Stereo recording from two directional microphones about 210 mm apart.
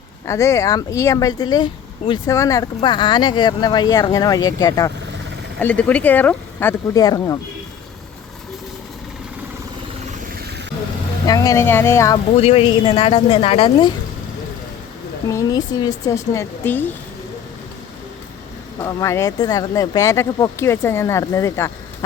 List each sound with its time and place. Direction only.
0.3 s speech: 15° left (ahead or behind)
5.5 s speech: 5° left (ahead or behind)
11.3 s speech: 15° left (ahead or behind)
12.4 s a woman's voice: 30° left (ahead or behind)
15.3 s speech: 15° left (ahead or behind)
18.8 s speech: 15° left (ahead or behind)